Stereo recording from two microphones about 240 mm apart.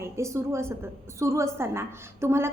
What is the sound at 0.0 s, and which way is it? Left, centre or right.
A woman's voice, centre.